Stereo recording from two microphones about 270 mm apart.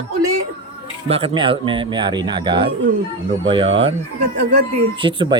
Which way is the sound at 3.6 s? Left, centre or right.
Right.